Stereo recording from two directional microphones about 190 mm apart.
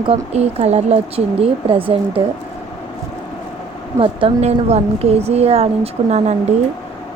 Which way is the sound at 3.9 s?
30° right (ahead or behind).